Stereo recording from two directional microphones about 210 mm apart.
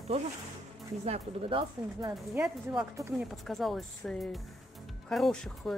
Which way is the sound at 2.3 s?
10° right (ahead or behind).